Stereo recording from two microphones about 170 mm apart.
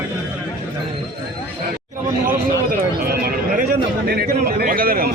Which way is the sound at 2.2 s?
60° right (ahead or behind).